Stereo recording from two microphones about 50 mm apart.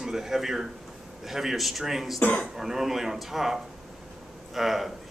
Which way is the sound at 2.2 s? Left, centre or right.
Left.